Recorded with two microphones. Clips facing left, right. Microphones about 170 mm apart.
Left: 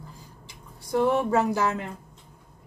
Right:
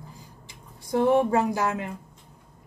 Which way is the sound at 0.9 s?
15° right (ahead or behind).